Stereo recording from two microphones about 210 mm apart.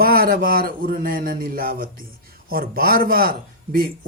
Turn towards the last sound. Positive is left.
turn(degrees=-45)  # may be behind; listen again after turning